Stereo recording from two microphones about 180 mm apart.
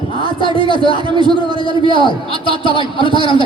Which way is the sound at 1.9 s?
30° left (ahead or behind).